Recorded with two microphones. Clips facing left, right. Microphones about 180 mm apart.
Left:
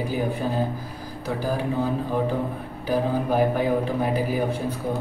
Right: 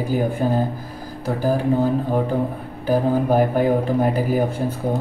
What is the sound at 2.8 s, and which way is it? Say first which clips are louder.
Speech: right 5 dB; 45° right (ahead or behind).